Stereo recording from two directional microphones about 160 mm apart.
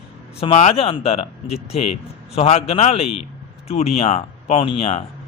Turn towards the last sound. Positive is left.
turn(degrees=40)  # may be behind; listen again after turning